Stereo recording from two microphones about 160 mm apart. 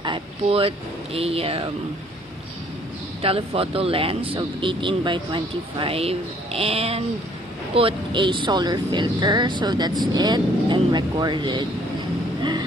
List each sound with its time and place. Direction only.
0.0 s speech: 35° right (ahead or behind)
3.2 s speech: 35° right (ahead or behind)